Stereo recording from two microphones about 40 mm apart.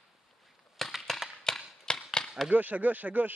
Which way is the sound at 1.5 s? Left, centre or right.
Centre.